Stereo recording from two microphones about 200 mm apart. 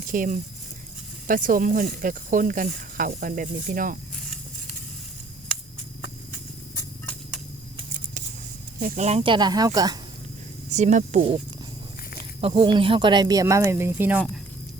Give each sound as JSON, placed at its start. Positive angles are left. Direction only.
{"t": 0.1, "sound": "speech", "side_deg": -40}
{"t": 4.1, "sound": "a sound", "side_deg": 0}
{"t": 6.7, "sound": "a sound", "side_deg": 10}
{"t": 8.8, "sound": "speech", "side_deg": -35}
{"t": 10.7, "sound": "speech", "side_deg": -35}
{"t": 12.4, "sound": "speech", "side_deg": -30}